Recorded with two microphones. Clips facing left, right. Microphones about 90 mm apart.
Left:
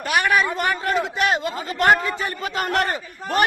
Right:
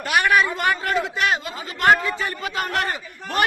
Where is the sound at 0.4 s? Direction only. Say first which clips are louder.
Even; 30° left (ahead or behind).